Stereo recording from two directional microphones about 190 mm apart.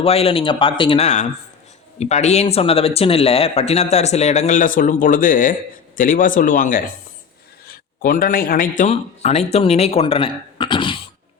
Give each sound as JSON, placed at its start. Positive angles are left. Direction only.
{"t": 0.0, "sound": "speech", "side_deg": 30}
{"t": 8.8, "sound": "speech", "side_deg": 35}